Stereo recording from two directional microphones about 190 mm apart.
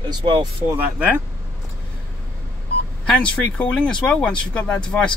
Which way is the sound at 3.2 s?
5° left (ahead or behind).